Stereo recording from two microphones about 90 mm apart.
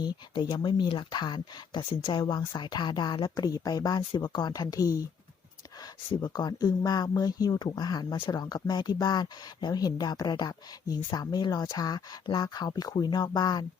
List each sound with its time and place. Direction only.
0.0 s speech: 55° left (ahead or behind)
6.2 s speech: 45° left (ahead or behind)